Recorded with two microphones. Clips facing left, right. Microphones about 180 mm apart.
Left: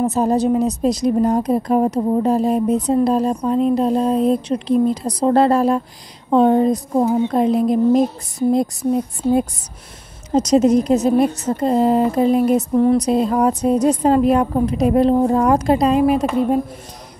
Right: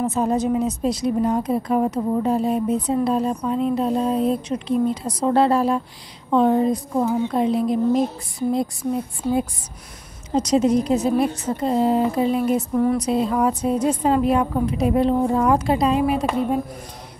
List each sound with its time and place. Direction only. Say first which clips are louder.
0.0 s a woman's voice: left 4 dB; 40° left (ahead or behind)
10.3 s a woman's voice: left 4 dB; 40° left (ahead or behind)
12.7 s speech: left 6 dB; 25° left (ahead or behind)
13.0 s a woman's voice: left 4 dB; 45° left (ahead or behind)